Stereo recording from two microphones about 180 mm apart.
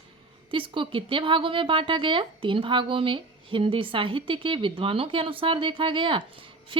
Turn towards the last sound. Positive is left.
turn(degrees=-30)  # may be behind; listen again after turning